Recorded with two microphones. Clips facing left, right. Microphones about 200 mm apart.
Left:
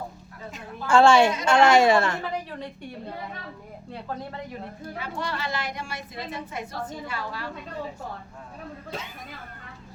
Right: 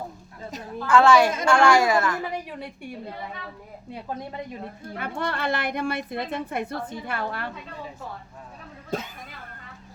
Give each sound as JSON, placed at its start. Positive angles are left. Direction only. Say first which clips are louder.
{"t": 0.9, "sound": "speech", "louder": "even", "side_deg": 30}
{"t": 2.5, "sound": "a woman's voice", "louder": "even", "side_deg": -10}
{"t": 4.9, "sound": "a woman's voice", "louder": "right 3 dB", "side_deg": -55}
{"t": 8.9, "sound": "speech", "louder": "right 8 dB", "side_deg": -45}